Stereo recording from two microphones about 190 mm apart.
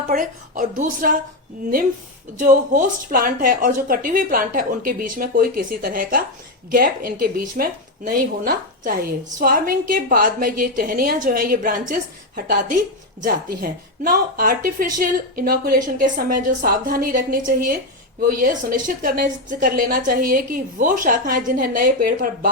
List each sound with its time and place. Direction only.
0.1 s a woman's voice: 45° right (ahead or behind)
2.4 s a woman's voice: 40° right (ahead or behind)